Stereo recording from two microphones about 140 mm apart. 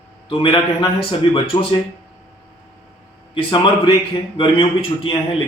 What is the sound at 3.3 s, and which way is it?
A man's voice, 35° left (ahead or behind).